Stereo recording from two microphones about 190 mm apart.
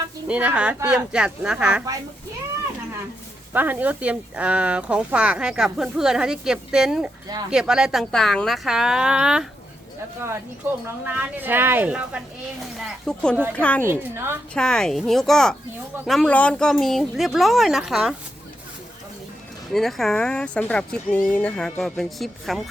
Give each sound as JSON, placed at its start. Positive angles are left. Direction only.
{"t": 0.3, "sound": "a woman's voice", "side_deg": -5}
{"t": 3.5, "sound": "speech", "side_deg": -10}
{"t": 10.8, "sound": "a woman's voice", "side_deg": -10}
{"t": 13.8, "sound": "a woman's voice", "side_deg": -10}
{"t": 14.5, "sound": "speech", "side_deg": 5}
{"t": 19.7, "sound": "speech", "side_deg": 0}